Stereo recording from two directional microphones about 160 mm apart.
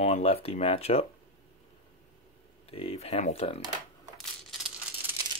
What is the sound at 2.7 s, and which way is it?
Speech, 40° left (ahead or behind).